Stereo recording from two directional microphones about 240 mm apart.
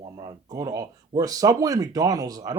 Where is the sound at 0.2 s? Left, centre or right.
Centre.